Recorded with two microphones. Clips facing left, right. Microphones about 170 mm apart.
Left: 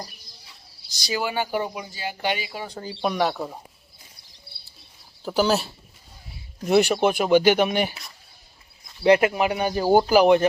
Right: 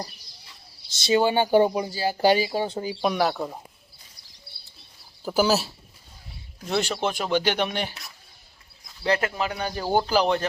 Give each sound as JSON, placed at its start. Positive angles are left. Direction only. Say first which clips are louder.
{"t": 0.9, "sound": "speech", "louder": "right 7 dB", "side_deg": -25}
{"t": 3.0, "sound": "speech", "louder": "left 1 dB", "side_deg": 0}
{"t": 5.2, "sound": "speech", "louder": "even", "side_deg": -5}
{"t": 6.7, "sound": "speech", "louder": "left 7 dB", "side_deg": 10}
{"t": 9.0, "sound": "speech", "louder": "left 7 dB", "side_deg": 15}